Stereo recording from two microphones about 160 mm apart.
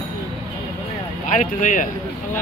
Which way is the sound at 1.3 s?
50° left (ahead or behind).